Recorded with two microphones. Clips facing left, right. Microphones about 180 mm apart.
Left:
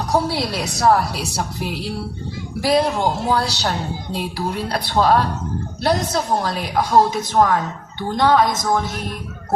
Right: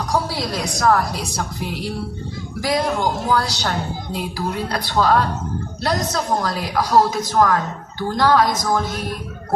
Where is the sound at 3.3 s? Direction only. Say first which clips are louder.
Even; 30° left (ahead or behind).